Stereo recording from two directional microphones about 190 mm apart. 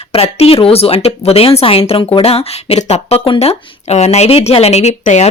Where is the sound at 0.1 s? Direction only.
30° left (ahead or behind).